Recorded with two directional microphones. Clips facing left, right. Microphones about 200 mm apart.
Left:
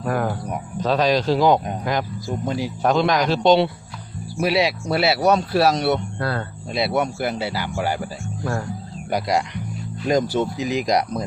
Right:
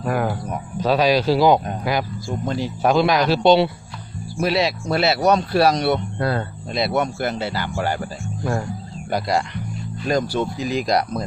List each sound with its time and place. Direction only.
0.0 s a man's voice: 5° right (ahead or behind)
2.3 s speech: 5° left (ahead or behind)
2.8 s a man's voice: 10° right (ahead or behind)
4.4 s speech: 10° left (ahead or behind)
6.1 s speech: 20° right (ahead or behind)
6.7 s speech: 5° left (ahead or behind)
9.0 s speech: 10° left (ahead or behind)